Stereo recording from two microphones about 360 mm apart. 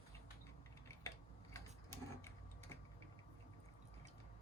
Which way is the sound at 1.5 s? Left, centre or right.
Centre.